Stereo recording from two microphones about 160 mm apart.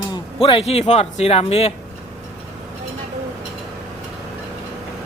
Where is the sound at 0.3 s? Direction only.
35° left (ahead or behind).